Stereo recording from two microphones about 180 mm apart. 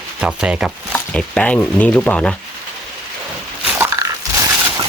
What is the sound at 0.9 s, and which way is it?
Speech, 5° left (ahead or behind).